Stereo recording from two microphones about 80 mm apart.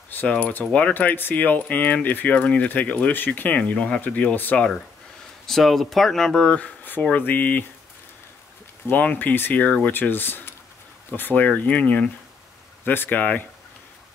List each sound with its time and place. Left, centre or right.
0.1 s speech: centre
5.5 s speech: centre; by 7.6 s left
8.8 s speech: left